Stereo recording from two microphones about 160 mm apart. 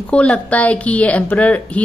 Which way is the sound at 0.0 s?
10° left (ahead or behind).